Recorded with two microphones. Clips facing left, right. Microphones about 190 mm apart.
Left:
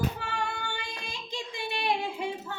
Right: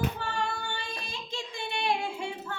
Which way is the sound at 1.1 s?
15° left (ahead or behind).